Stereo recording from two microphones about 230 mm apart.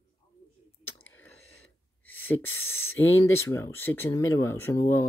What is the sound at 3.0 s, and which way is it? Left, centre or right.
Speech, left.